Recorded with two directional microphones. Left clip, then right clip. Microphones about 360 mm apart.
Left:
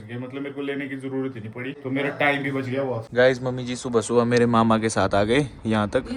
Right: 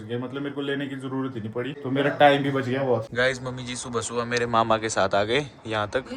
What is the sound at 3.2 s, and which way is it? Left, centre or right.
Speech, centre.